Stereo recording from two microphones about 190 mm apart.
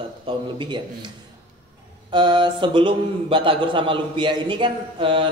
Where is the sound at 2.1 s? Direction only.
25° right (ahead or behind).